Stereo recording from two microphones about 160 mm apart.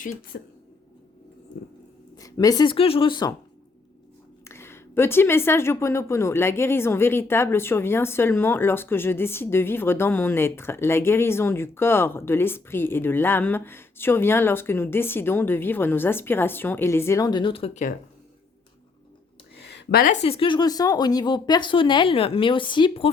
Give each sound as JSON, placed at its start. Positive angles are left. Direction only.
{"t": 0.3, "sound": "speech", "side_deg": 90}
{"t": 2.1, "sound": "speech", "side_deg": 20}
{"t": 2.7, "sound": "speech", "side_deg": 35}
{"t": 4.4, "sound": "a woman's voice", "side_deg": 15}
{"t": 19.5, "sound": "a sound", "side_deg": 90}
{"t": 20.2, "sound": "speech", "side_deg": 35}